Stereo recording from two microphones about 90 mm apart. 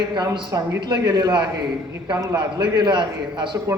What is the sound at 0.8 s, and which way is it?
A man's voice, 50° right (ahead or behind).